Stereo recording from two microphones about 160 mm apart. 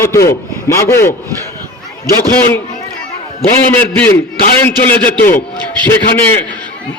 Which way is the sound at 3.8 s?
10° left (ahead or behind).